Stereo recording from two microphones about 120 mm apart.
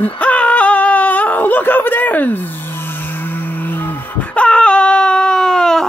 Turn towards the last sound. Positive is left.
turn(degrees=5)  # may be behind; listen again after turning